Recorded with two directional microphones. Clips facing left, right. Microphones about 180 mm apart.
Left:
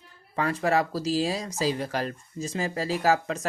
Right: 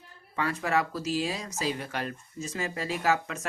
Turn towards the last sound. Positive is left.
turn(degrees=35)  # may be behind; listen again after turning